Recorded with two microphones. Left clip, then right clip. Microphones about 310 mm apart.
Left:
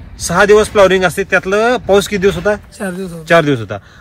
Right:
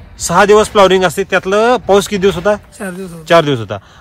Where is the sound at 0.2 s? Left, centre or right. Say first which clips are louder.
Right 1 dB; centre.